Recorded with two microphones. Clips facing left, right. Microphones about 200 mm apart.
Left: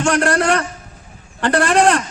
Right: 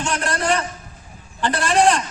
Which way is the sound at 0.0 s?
70° left (ahead or behind).